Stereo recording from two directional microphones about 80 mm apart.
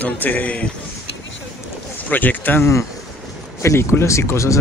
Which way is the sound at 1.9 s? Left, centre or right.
Left.